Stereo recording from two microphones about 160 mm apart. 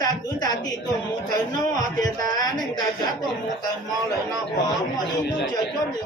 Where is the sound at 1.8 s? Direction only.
25° left (ahead or behind).